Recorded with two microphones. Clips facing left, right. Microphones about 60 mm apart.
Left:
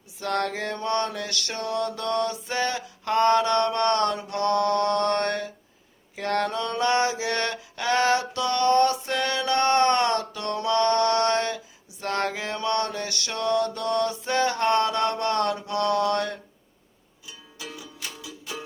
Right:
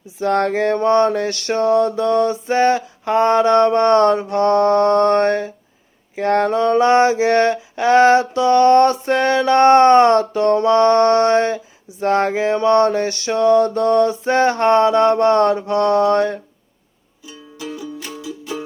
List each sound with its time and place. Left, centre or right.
0.2 s mantra: right
3.0 s mantra: centre
17.6 s music: right